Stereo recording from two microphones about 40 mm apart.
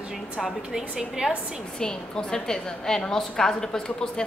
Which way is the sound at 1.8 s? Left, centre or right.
Centre.